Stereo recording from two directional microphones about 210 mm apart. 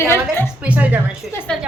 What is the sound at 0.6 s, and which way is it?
Speech, 5° right (ahead or behind).